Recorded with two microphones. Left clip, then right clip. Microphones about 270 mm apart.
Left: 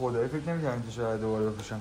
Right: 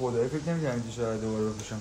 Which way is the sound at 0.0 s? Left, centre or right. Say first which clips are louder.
Right 1 dB; centre.